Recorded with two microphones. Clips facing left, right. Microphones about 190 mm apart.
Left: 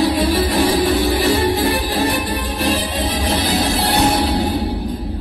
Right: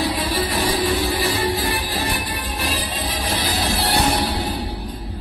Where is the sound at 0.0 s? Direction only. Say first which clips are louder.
Left 6 dB; 50° left (ahead or behind).